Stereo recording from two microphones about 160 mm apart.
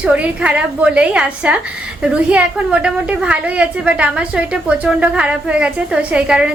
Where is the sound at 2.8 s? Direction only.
5° right (ahead or behind).